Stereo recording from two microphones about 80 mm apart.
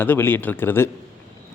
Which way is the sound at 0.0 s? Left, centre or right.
Left.